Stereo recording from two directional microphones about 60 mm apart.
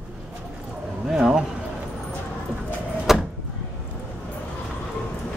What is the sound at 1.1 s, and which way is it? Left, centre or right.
Speech, centre.